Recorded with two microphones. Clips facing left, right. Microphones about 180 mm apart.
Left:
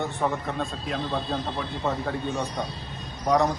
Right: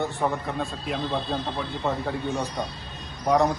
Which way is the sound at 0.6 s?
Centre (ahead or behind).